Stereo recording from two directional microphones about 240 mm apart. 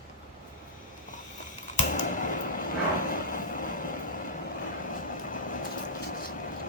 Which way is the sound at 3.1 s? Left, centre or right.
Left.